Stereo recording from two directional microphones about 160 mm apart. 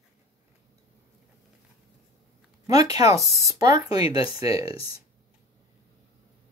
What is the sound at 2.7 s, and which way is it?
Speech, 25° right (ahead or behind).